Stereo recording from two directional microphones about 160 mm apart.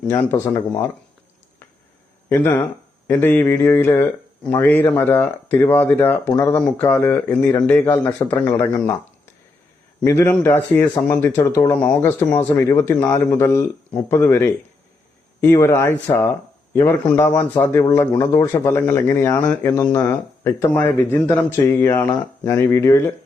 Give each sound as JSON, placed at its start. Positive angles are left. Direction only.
{"t": 0.1, "sound": "a man's voice", "side_deg": 15}
{"t": 2.3, "sound": "a man's voice", "side_deg": 15}